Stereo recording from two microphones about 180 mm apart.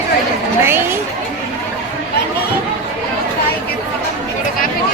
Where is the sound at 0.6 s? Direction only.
15° right (ahead or behind).